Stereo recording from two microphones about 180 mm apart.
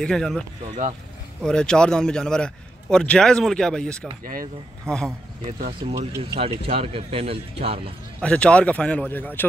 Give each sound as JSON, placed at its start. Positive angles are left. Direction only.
{"t": 0.0, "sound": "a man's voice", "side_deg": 5}
{"t": 4.2, "sound": "speech", "side_deg": -50}
{"t": 4.8, "sound": "speech", "side_deg": 5}
{"t": 5.8, "sound": "speech", "side_deg": -30}
{"t": 8.2, "sound": "a man's voice", "side_deg": 5}